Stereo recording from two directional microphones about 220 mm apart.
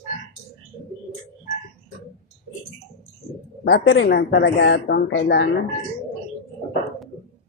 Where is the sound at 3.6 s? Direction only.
50° left (ahead or behind).